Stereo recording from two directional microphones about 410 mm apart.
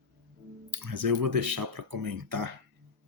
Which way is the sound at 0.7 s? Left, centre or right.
Right.